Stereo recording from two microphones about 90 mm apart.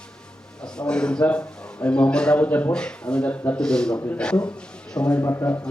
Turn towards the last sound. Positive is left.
turn(degrees=30)  # may be behind; listen again after turning